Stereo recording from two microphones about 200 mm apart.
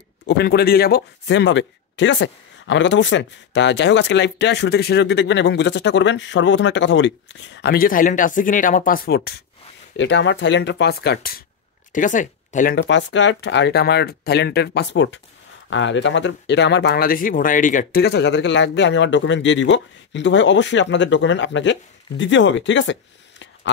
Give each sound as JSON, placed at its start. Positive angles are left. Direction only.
{"t": 0.3, "sound": "speech", "side_deg": 55}
{"t": 9.9, "sound": "speech", "side_deg": 65}
{"t": 11.9, "sound": "speech", "side_deg": 40}
{"t": 12.7, "sound": "speech", "side_deg": 65}